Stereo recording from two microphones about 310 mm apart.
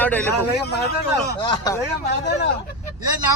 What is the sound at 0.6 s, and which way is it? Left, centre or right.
Speech, left.